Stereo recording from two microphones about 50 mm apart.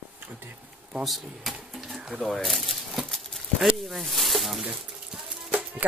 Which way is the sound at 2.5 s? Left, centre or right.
Centre.